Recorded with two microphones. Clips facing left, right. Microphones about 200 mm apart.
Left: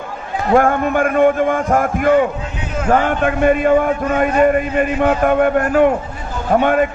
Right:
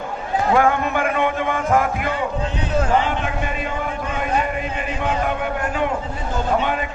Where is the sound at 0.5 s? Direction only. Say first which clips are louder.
Left 6 dB; 50° left (ahead or behind).